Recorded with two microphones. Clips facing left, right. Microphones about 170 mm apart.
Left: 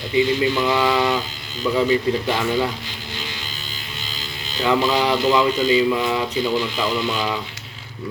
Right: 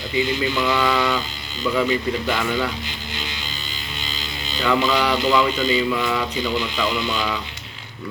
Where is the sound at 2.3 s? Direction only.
25° left (ahead or behind).